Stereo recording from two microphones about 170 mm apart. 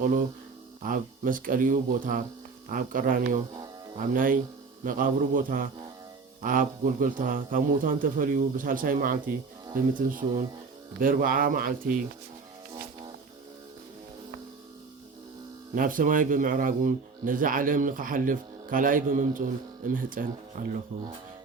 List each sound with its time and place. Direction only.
0.8 s speech: 50° right (ahead or behind)
15.7 s speech: 55° right (ahead or behind)